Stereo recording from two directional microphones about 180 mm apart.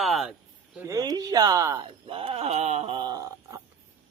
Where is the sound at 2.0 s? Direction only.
30° right (ahead or behind).